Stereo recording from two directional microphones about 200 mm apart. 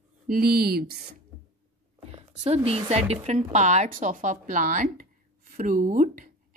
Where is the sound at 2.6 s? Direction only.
30° right (ahead or behind).